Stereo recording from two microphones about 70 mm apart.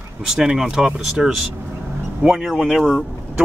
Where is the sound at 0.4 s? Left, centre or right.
Centre.